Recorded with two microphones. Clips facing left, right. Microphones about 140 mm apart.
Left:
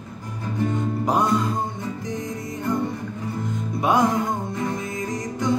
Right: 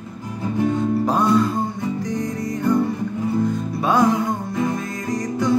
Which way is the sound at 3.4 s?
20° left (ahead or behind).